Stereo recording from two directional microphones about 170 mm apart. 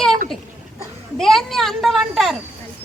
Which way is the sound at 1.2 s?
Centre (ahead or behind).